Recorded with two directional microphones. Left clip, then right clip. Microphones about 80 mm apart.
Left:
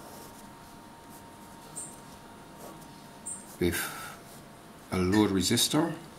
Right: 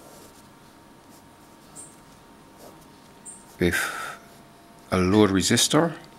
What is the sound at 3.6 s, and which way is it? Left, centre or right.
Speech, right.